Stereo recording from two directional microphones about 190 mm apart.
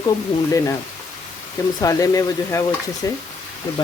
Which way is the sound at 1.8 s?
15° left (ahead or behind).